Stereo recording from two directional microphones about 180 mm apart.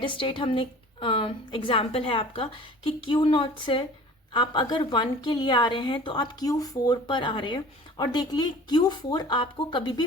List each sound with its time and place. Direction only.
0.0 s a woman's voice: 30° left (ahead or behind)